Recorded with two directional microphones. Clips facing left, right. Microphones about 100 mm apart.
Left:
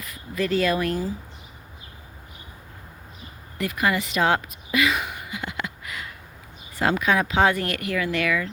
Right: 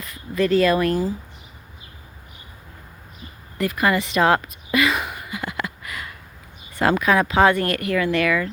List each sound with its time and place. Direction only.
0.0 s speech: 40° right (ahead or behind)
3.6 s speech: 40° right (ahead or behind)
3.9 s a sound: 40° right (ahead or behind)
6.7 s speech: 55° right (ahead or behind)